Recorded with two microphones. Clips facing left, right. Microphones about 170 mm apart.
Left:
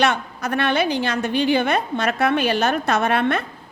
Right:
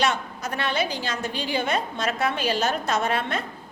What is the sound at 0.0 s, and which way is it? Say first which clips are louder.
A woman's voice: left 4 dB; 60° left (ahead or behind).